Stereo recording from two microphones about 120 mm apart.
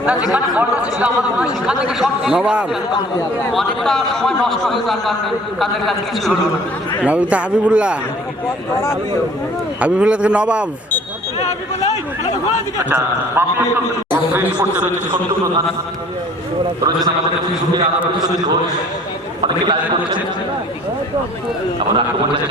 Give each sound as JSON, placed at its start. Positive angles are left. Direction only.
{"t": 0.0, "sound": "a man's voice", "side_deg": -10}
{"t": 7.0, "sound": "speech", "side_deg": -10}
{"t": 9.8, "sound": "speech", "side_deg": -10}
{"t": 12.8, "sound": "speech", "side_deg": -15}
{"t": 19.4, "sound": "a man's voice", "side_deg": -40}
{"t": 21.8, "sound": "a man's voice", "side_deg": -45}